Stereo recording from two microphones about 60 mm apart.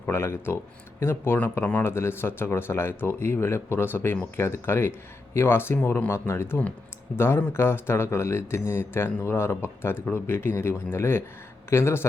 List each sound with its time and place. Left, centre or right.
0.0 s speech: left